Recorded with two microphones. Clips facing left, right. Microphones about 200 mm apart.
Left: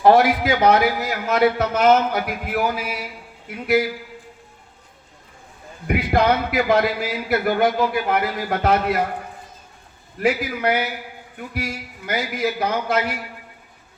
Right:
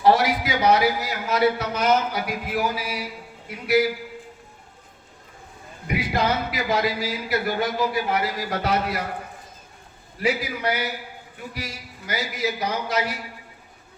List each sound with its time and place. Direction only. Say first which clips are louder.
0.0 s a man's voice: left 4 dB; 55° left (ahead or behind)
5.9 s a man's voice: left 5 dB; 55° left (ahead or behind)
10.2 s a man's voice: left 4 dB; 55° left (ahead or behind)